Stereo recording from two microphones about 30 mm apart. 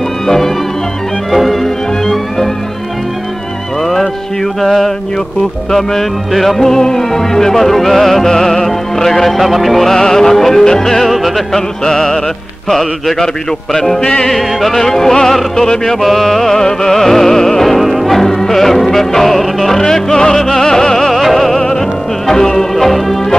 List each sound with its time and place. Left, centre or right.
1.3 s music: centre
2.0 s music: centre
3.8 s music: centre
9.4 s music: centre
9.8 s music: centre
11.1 s music: centre
11.5 s music: centre
12.6 s music: centre
13.7 s music: centre
14.3 s music: centre; by 15.8 s left
15.8 s music: centre
17.7 s music: centre
21.1 s music: centre
22.8 s music: centre